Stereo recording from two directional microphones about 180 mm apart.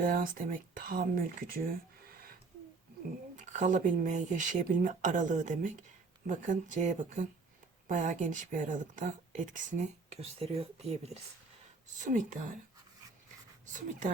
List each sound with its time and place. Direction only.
0.0 s speech: 50° right (ahead or behind)
3.3 s speech: 45° right (ahead or behind)
12.0 s speech: 45° right (ahead or behind)